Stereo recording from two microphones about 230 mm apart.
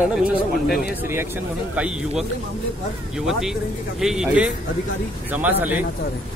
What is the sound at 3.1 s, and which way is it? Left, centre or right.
Speech, centre.